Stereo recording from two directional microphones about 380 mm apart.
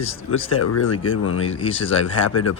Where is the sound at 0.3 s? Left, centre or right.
Left.